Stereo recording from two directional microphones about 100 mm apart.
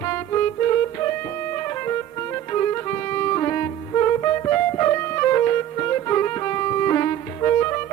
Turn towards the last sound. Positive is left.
turn(degrees=25)  # may be behind; listen again after turning